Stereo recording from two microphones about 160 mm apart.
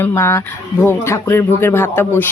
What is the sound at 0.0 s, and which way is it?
Speech, 15° left (ahead or behind).